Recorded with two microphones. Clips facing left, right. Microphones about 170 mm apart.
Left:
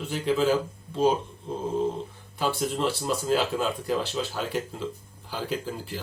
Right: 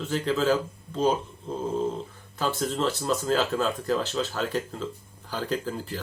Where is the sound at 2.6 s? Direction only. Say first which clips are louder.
Even; 10° left (ahead or behind).